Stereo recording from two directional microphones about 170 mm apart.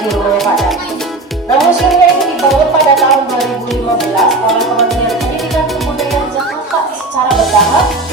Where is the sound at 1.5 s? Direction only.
Centre (ahead or behind).